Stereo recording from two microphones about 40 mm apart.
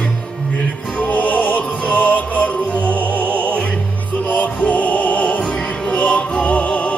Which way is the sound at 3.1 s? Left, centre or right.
Left.